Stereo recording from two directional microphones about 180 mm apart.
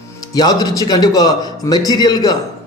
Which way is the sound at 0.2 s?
20° left (ahead or behind).